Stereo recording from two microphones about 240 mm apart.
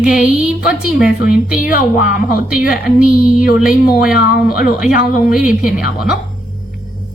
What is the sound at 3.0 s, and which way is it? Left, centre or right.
Speech, centre.